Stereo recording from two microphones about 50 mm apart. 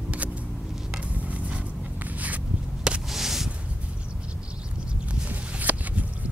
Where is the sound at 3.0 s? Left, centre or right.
Centre.